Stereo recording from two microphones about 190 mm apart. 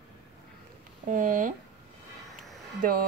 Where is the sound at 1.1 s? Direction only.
45° right (ahead or behind).